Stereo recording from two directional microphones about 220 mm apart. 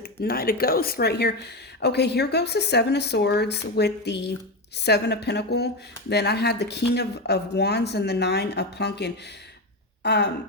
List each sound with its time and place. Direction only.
0.0 s speech: 45° left (ahead or behind)
10.0 s throat clearing: 50° left (ahead or behind)